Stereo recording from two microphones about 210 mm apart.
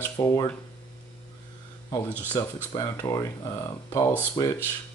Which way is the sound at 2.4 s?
15° left (ahead or behind).